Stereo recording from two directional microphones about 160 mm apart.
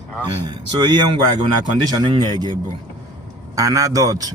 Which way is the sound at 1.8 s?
25° right (ahead or behind).